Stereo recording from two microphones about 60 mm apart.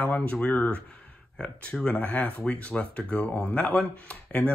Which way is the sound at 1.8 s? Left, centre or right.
Left.